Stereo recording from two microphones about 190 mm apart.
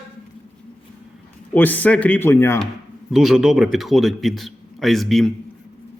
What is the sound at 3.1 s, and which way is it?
A man's voice, centre (ahead or behind).